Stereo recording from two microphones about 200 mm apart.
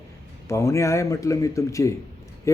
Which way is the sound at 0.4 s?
15° left (ahead or behind).